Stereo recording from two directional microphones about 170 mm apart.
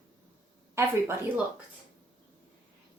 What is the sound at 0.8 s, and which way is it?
Speech, 15° right (ahead or behind).